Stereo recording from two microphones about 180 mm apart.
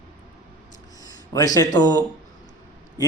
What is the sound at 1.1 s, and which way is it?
Speech, 20° left (ahead or behind).